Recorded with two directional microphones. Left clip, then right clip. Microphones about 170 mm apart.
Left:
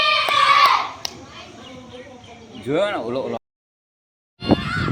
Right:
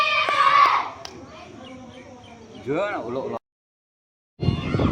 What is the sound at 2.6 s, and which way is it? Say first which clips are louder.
Speech: left 4 dB; 60° left (ahead or behind).